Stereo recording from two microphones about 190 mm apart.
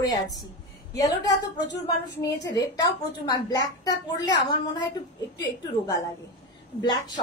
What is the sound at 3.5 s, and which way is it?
A woman's voice, 20° left (ahead or behind).